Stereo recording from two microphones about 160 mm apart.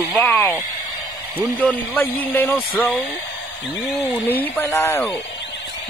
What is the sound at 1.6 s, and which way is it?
Speech, 10° left (ahead or behind).